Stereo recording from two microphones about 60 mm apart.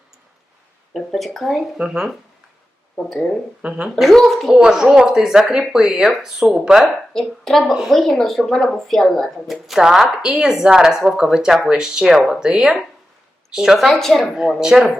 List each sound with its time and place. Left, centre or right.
0.9 s speech: centre
1.8 s speech: centre
3.6 s speech: centre
3.9 s speech: centre
4.5 s speech: centre
7.1 s a woman's voice: centre
9.5 s a woman's voice: centre